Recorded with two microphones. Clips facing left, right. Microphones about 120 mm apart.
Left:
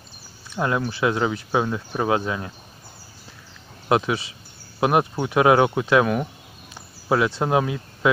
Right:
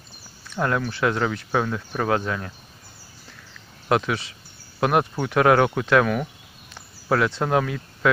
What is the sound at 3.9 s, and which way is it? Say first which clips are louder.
Speech: left 1 dB; 20° left (ahead or behind).